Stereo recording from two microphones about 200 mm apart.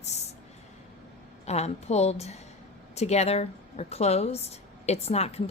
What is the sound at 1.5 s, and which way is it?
Speech, 30° left (ahead or behind).